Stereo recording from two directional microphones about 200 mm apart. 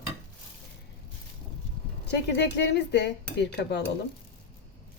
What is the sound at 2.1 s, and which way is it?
A woman's voice, 55° left (ahead or behind).